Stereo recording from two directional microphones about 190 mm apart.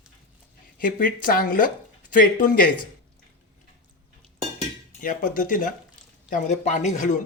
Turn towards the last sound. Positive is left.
turn(degrees=40)  # may be behind; listen again after turning